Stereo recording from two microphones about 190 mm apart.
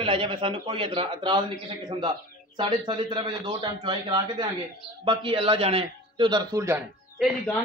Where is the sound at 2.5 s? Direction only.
25° right (ahead or behind).